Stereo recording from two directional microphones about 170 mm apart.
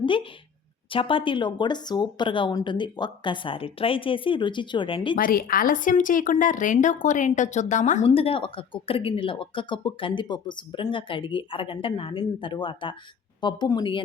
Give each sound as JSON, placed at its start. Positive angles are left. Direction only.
{"t": 0.0, "sound": "speech", "side_deg": 30}
{"t": 5.1, "sound": "a woman's voice", "side_deg": 55}